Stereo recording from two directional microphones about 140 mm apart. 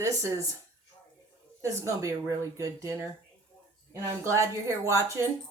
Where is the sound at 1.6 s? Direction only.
20° right (ahead or behind).